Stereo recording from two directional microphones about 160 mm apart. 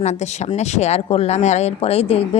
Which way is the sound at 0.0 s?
45° left (ahead or behind).